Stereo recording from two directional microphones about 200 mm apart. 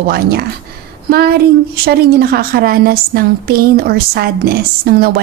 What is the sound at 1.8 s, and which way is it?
A woman's voice, 50° right (ahead or behind).